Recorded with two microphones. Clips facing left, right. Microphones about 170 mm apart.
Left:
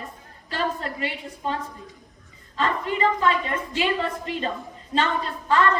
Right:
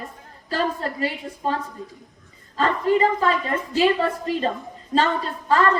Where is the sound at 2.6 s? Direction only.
40° right (ahead or behind).